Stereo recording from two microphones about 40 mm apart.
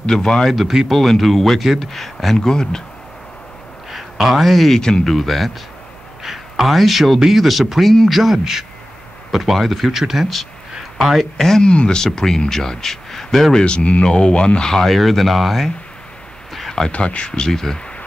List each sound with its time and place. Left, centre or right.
0.0 s speech: centre
0.7 s speech: centre
0.9 s speech: centre
2.3 s speech: centre
3.9 s speech: centre
4.7 s speech: centre
5.0 s a man's voice: centre
11.3 s speech: centre
11.6 s speech: left
12.0 s speech: centre
13.6 s speech: left
14.8 s speech: centre
16.9 s speech: left
17.3 s speech: centre